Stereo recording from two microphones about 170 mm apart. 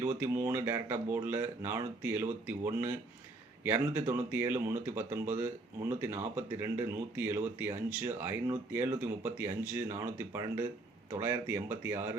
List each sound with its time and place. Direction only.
0.0 s speech: 15° right (ahead or behind)